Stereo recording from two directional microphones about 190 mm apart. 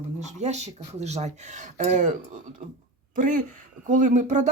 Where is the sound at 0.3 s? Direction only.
35° right (ahead or behind).